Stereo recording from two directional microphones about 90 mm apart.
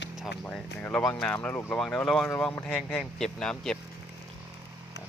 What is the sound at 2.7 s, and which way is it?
Speech, 5° left (ahead or behind).